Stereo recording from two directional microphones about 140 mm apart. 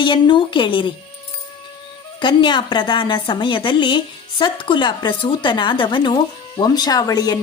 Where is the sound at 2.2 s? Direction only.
35° left (ahead or behind).